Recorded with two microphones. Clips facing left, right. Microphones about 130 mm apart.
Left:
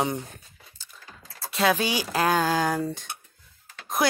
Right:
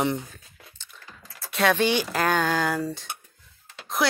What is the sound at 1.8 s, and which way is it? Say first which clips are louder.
Speech: right 1 dB; 40° left (ahead or behind).